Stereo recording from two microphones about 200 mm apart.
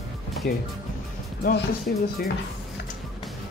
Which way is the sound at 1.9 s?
45° left (ahead or behind).